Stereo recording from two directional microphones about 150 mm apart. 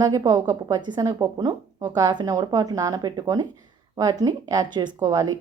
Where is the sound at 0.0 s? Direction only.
25° right (ahead or behind).